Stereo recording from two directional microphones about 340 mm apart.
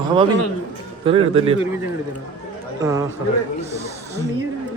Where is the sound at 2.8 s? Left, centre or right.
Centre.